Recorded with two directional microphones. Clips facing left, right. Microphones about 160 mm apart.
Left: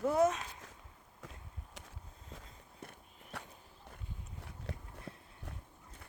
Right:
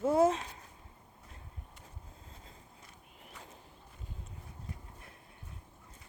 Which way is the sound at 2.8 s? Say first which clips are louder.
Left 4 dB; 55° left (ahead or behind).